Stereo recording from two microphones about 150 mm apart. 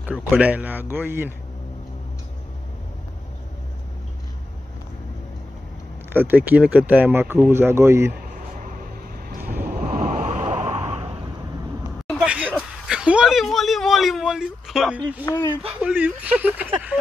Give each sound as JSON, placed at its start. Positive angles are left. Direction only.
{"t": 0.2, "sound": "speech", "side_deg": -10}
{"t": 6.1, "sound": "speech", "side_deg": -10}
{"t": 8.4, "sound": "a sound", "side_deg": -65}
{"t": 9.3, "sound": "vehicle", "side_deg": -75}
{"t": 9.7, "sound": "a sound", "side_deg": -70}
{"t": 12.1, "sound": "a sound", "side_deg": -5}
{"t": 12.8, "sound": "speech", "side_deg": -5}
{"t": 15.3, "sound": "speech", "side_deg": 15}
{"t": 15.8, "sound": "speech", "side_deg": -10}